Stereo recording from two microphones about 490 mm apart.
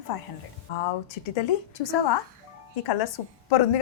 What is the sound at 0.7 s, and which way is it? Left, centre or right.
Speech, left.